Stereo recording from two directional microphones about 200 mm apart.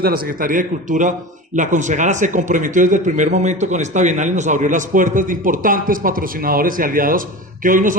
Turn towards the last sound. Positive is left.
turn(degrees=-40)  # may be behind; listen again after turning